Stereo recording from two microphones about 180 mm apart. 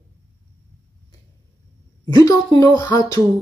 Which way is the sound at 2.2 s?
20° left (ahead or behind).